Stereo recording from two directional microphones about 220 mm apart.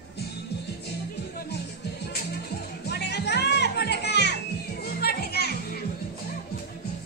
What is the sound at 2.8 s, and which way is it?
Music, 50° left (ahead or behind).